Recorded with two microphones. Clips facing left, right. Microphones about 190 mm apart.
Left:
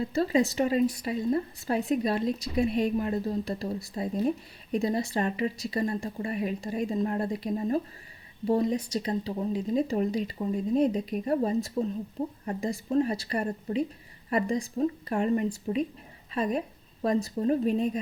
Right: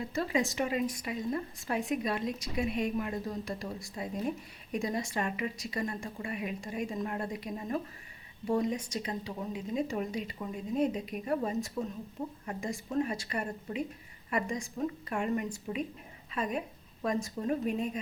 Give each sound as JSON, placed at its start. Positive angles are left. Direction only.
{"t": 0.1, "sound": "a woman's voice", "side_deg": 35}